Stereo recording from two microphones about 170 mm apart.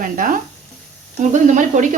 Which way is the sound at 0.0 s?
50° right (ahead or behind).